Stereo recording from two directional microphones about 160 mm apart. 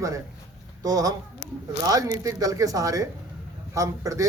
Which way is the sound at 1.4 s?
85° left.